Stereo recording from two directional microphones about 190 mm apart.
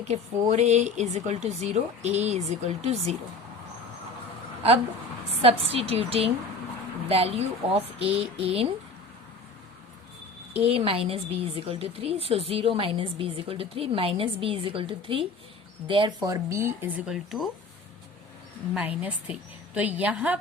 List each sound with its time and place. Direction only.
0.0 s speech: 35° right (ahead or behind)
5.4 s speech: 30° right (ahead or behind)
10.5 s a woman's voice: 30° right (ahead or behind); by 17.5 s centre (ahead or behind)
18.7 s speech: 5° right (ahead or behind)